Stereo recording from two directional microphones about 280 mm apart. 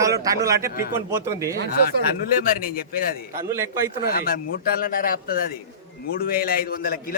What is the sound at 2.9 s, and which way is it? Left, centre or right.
A man's voice, left.